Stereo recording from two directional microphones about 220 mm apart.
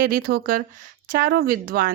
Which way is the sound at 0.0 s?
40° right (ahead or behind).